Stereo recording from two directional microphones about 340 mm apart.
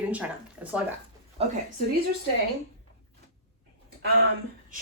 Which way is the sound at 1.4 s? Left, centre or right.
Centre.